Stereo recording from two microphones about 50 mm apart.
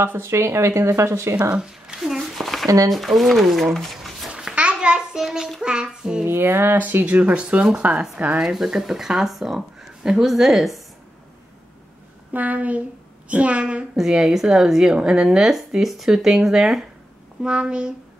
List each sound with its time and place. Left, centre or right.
0.0 s speech: right
1.5 s speech: centre
3.7 s a sound: centre
4.3 s a sound: centre
5.6 s a woman's voice: centre
6.2 s a sound: right
6.8 s speech: right
7.1 s speech: right
8.4 s a woman's voice: centre
12.3 s a woman's voice: right
13.9 s a woman's voice: centre
17.4 s a woman's voice: centre